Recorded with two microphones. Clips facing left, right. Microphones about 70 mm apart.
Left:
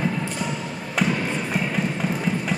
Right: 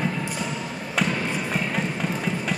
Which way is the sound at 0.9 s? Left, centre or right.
Centre.